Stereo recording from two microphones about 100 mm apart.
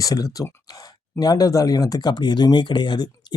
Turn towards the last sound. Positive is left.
turn(degrees=45)  # may be behind; listen again after turning